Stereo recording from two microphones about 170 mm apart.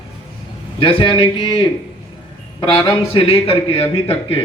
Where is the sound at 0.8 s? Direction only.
30° left (ahead or behind).